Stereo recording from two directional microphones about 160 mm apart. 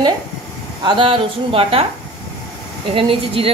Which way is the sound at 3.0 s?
35° right (ahead or behind).